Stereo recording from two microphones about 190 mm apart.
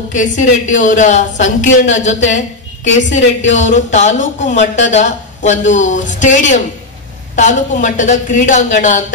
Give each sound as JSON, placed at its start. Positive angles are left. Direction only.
{"t": 0.1, "sound": "a woman's voice", "side_deg": 40}